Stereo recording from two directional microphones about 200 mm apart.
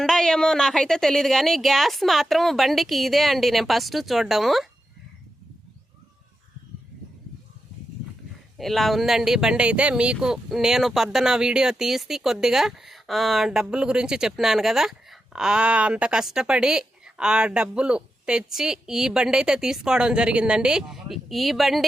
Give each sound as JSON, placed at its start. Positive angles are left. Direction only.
{"t": 0.0, "sound": "speech", "side_deg": 5}
{"t": 8.5, "sound": "speech", "side_deg": 0}